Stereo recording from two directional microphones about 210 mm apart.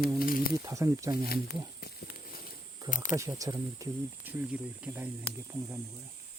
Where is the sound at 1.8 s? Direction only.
50° left (ahead or behind).